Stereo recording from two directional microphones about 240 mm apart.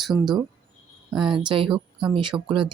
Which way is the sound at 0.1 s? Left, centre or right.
Centre.